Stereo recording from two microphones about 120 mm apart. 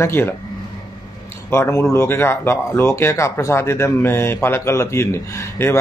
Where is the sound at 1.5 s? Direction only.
20° left (ahead or behind).